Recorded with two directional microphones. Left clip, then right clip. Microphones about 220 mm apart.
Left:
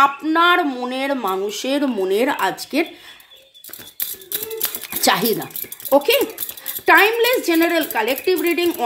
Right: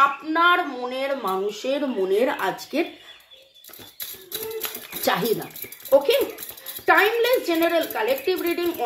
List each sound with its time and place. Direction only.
0.0 s speech: 50° left (ahead or behind)
5.0 s speech: 45° left (ahead or behind)